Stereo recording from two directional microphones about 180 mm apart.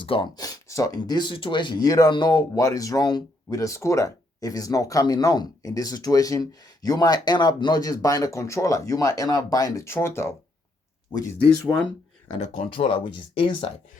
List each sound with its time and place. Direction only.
0.0 s a sound: 30° left (ahead or behind)
0.9 s speech: 25° left (ahead or behind)
12.4 s speech: 35° left (ahead or behind)